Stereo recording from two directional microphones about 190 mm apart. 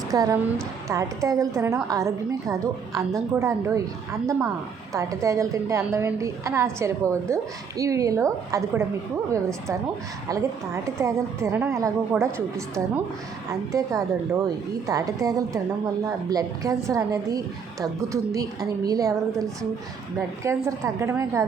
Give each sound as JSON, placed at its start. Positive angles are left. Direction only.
{"t": 0.1, "sound": "a woman's voice", "side_deg": -15}
{"t": 10.8, "sound": "a woman's voice", "side_deg": -15}
{"t": 20.7, "sound": "a woman's voice", "side_deg": -15}